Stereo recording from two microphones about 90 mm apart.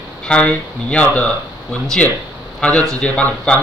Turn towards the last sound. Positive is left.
turn(degrees=15)  # may be behind; listen again after turning